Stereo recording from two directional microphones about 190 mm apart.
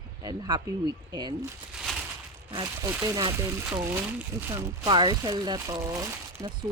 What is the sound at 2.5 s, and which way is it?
A woman's voice, 20° right (ahead or behind).